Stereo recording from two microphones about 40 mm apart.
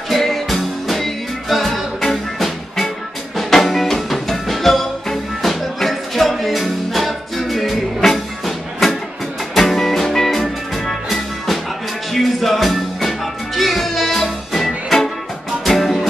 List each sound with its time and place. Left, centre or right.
0.2 s music: centre